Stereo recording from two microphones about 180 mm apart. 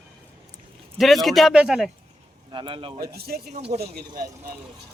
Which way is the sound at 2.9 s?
60° right (ahead or behind).